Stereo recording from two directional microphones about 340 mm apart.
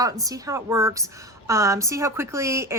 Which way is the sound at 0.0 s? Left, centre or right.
Centre.